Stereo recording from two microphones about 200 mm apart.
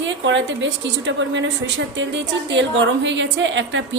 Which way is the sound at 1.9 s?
65° right (ahead or behind).